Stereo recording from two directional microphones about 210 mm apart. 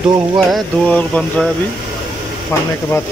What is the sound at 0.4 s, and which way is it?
Speech, centre (ahead or behind).